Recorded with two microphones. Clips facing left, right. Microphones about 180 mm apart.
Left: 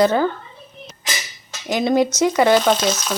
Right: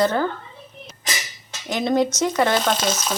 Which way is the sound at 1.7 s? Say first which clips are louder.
Left 3 dB; 10° left (ahead or behind).